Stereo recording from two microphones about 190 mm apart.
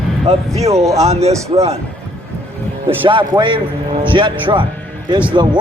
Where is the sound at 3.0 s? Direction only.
25° right (ahead or behind).